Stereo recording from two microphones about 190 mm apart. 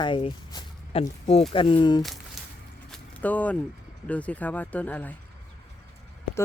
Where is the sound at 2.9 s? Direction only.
10° left (ahead or behind).